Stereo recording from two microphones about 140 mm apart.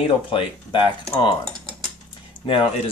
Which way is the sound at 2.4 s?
40° left (ahead or behind).